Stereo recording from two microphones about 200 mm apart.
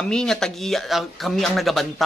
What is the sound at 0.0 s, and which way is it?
Speech, 5° left (ahead or behind).